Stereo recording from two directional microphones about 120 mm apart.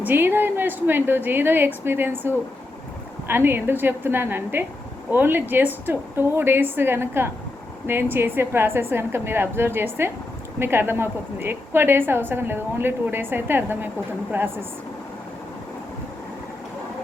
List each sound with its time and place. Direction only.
0.0 s a woman's voice: 15° right (ahead or behind)